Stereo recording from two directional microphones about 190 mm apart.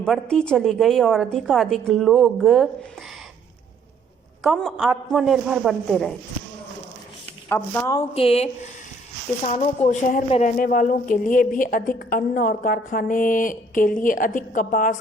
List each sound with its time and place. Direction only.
0.0 s a woman's voice: 5° left (ahead or behind)
4.4 s a woman's voice: centre (ahead or behind)
7.5 s speech: 15° left (ahead or behind)
8.1 s speech: 30° left (ahead or behind)
9.8 s speech: 40° left (ahead or behind)